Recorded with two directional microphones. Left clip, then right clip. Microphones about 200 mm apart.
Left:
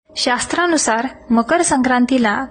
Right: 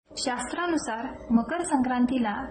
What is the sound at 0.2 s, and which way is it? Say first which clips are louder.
A woman's voice: left 12 dB; 40° left (ahead or behind).